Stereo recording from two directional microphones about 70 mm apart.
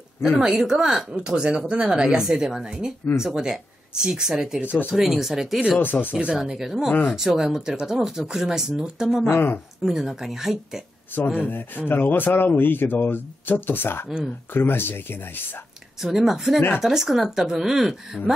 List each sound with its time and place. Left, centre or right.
0.2 s speech: centre
4.6 s speech: left
4.9 s speech: centre
5.8 s speech: left
6.1 s speech: centre
6.9 s speech: left
7.2 s speech: centre
9.3 s speech: left
9.8 s speech: centre
11.3 s speech: left
14.0 s speech: centre
14.5 s speech: left
16.0 s speech: centre